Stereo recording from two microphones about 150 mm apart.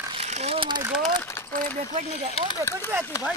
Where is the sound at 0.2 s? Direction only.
45° right (ahead or behind).